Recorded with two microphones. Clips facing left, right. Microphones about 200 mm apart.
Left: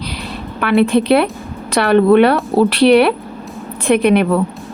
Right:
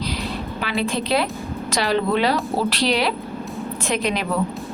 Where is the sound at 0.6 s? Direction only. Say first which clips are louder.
Left 12 dB; 60° left (ahead or behind).